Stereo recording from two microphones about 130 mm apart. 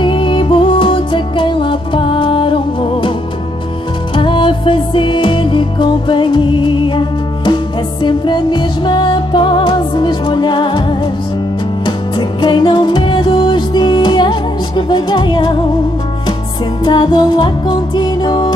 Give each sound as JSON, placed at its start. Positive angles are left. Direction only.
{"t": 0.0, "sound": "music", "side_deg": 40}
{"t": 4.1, "sound": "music", "side_deg": 40}
{"t": 16.8, "sound": "music", "side_deg": 30}